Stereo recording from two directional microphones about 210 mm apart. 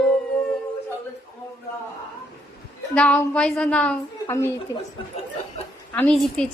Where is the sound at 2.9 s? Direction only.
5° left (ahead or behind).